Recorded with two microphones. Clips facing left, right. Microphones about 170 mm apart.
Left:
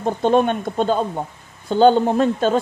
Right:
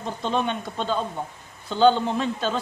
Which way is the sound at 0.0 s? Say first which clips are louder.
Left 9 dB; 50° left (ahead or behind).